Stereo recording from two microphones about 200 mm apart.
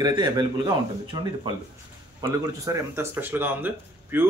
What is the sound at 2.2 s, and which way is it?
Speech, 15° right (ahead or behind).